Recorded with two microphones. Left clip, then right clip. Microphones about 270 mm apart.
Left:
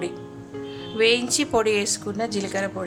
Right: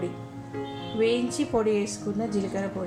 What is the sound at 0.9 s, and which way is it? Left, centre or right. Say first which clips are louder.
Speech: left 5 dB; left.